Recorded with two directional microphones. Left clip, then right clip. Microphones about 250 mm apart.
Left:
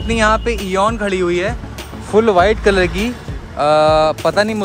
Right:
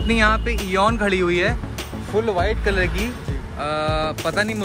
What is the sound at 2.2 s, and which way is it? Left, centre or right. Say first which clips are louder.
Speech: left 9 dB; left.